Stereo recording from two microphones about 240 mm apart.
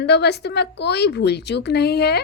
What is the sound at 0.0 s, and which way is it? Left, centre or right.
Speech, left.